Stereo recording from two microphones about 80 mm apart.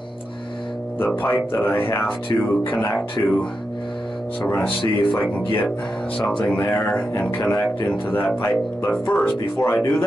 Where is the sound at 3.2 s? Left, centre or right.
Left.